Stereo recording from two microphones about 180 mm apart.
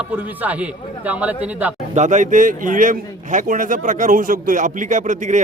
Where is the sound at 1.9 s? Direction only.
40° right (ahead or behind).